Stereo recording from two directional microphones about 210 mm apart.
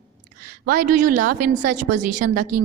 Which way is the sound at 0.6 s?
40° right (ahead or behind).